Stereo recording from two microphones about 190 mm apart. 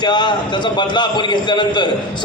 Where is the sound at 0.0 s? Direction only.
25° left (ahead or behind).